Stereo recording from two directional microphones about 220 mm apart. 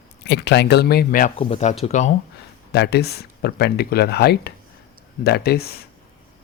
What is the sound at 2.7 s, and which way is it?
Speech, 50° left (ahead or behind).